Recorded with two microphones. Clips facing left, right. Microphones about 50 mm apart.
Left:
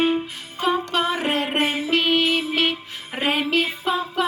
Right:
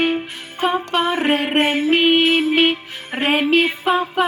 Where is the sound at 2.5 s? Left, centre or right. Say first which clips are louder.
Right 6 dB; right.